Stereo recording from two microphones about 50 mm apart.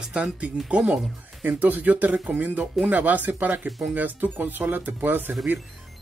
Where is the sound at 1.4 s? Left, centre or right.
Right.